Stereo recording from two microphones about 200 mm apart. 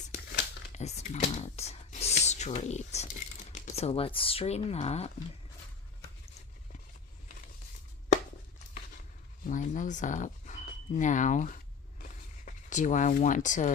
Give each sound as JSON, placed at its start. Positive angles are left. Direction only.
{"t": 0.1, "sound": "crumpling", "side_deg": 50}
{"t": 0.7, "sound": "speech", "side_deg": 35}
{"t": 9.5, "sound": "speech", "side_deg": 40}
{"t": 12.0, "sound": "a sound", "side_deg": 40}